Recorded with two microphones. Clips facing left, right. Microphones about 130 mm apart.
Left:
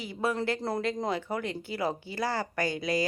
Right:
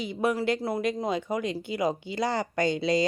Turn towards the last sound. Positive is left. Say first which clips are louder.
# right 4 dB
turn(degrees=-25)  # may be behind; listen again after turning